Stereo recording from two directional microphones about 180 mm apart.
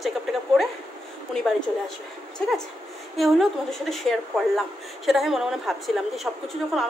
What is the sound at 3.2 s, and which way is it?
A woman's voice, centre (ahead or behind).